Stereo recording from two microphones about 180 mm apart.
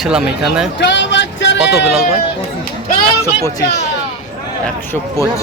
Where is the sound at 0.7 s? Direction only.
80° left.